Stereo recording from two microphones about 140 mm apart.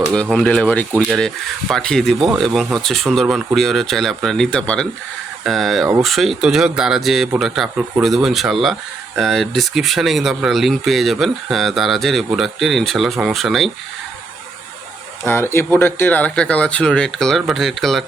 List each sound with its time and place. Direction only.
0.1 s speech: 5° left (ahead or behind)
15.2 s speech: 15° left (ahead or behind); by 18.0 s centre (ahead or behind)